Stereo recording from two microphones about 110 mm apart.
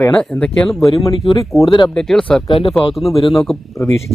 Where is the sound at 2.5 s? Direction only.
55° left (ahead or behind).